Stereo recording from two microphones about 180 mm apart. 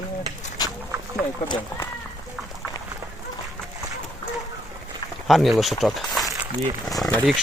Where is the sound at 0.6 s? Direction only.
20° left (ahead or behind).